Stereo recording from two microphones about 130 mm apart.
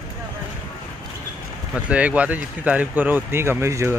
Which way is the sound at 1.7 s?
10° right (ahead or behind).